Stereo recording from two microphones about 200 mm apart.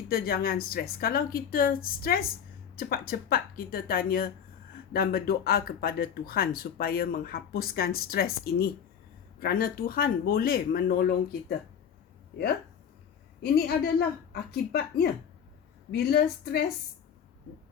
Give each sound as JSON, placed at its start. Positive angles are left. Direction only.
{"t": 0.1, "sound": "speech", "side_deg": 50}
{"t": 13.4, "sound": "speech", "side_deg": 50}